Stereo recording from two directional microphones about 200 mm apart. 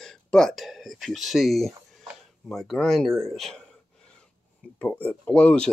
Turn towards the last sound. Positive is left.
turn(degrees=5)  # may be behind; listen again after turning